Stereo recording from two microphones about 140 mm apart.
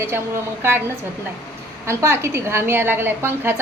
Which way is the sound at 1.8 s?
20° right (ahead or behind).